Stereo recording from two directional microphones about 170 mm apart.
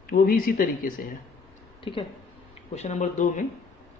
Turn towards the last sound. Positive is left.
turn(degrees=45)  # may be behind; listen again after turning